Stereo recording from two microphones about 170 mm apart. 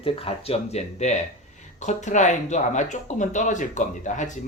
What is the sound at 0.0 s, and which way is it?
Speech, 35° left (ahead or behind).